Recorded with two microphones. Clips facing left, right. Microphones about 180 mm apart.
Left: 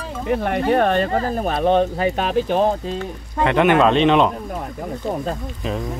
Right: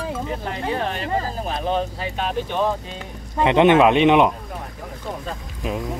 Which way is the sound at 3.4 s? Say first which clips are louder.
Right 1 dB; 20° right (ahead or behind).